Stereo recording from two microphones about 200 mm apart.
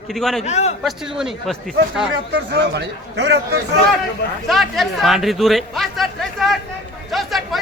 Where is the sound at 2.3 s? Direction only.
60° right (ahead or behind).